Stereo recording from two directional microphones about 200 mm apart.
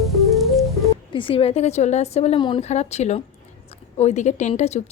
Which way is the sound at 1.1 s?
25° left (ahead or behind).